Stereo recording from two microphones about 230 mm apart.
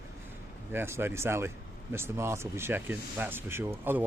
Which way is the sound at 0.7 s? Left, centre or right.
Centre.